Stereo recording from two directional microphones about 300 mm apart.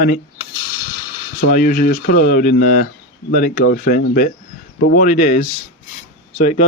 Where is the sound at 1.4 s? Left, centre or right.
Left.